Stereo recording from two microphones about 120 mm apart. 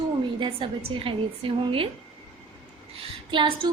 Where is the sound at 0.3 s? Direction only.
45° right (ahead or behind).